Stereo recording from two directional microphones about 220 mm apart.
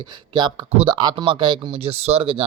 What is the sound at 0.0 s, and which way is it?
A man's voice, 20° right (ahead or behind).